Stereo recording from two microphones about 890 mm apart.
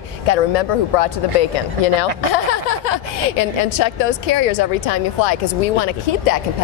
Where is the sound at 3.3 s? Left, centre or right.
Left.